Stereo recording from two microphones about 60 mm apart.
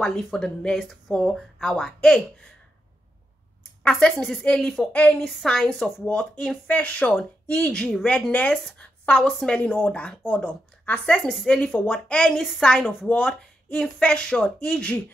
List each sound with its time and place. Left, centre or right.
0.2 s speech: centre
3.8 s speech: centre
5.3 s speech: centre
6.7 s a woman's voice: left
11.4 s speech: centre